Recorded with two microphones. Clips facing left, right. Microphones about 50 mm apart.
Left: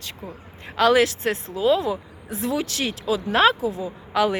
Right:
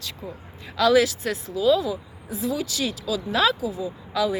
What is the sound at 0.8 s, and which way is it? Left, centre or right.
Speech, left.